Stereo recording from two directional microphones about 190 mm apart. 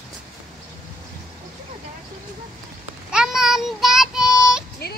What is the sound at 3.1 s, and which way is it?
Child singing, 5° right (ahead or behind).